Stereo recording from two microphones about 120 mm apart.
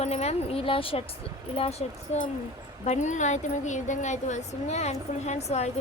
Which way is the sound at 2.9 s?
85° left.